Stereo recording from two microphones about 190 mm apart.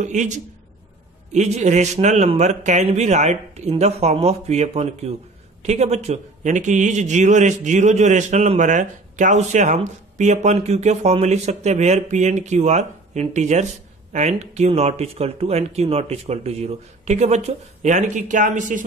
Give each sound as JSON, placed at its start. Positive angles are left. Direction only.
{"t": 0.0, "sound": "a man's voice", "side_deg": -40}